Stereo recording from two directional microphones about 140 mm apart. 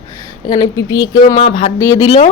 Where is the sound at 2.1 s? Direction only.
40° left (ahead or behind).